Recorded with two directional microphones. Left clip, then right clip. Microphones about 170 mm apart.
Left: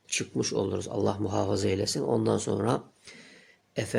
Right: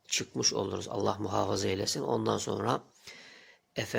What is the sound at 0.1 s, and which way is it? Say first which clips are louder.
Speech: left 1 dB; centre (ahead or behind).